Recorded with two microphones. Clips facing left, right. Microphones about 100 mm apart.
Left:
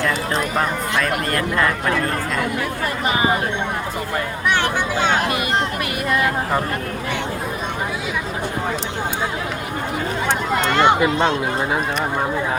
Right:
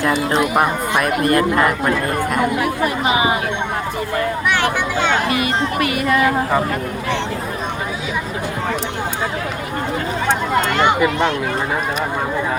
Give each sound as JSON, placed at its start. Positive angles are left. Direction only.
{"t": 0.3, "sound": "speech", "side_deg": -20}
{"t": 5.4, "sound": "speech", "side_deg": 0}
{"t": 10.8, "sound": "speech", "side_deg": 20}